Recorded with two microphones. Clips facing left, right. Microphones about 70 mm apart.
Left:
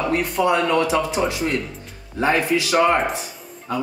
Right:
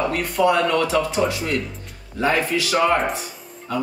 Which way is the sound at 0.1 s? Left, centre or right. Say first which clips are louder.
Even; left.